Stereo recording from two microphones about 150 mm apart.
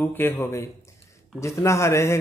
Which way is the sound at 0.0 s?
15° left (ahead or behind).